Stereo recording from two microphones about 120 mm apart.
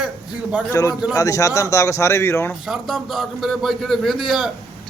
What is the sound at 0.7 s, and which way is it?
A man's voice, 25° left (ahead or behind).